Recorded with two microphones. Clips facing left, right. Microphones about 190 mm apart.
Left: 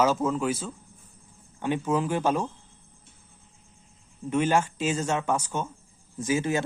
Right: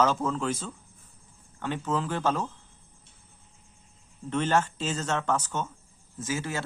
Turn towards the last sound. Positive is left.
turn(degrees=15)  # may be behind; listen again after turning